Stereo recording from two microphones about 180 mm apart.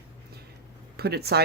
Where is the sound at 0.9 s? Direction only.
65° right (ahead or behind).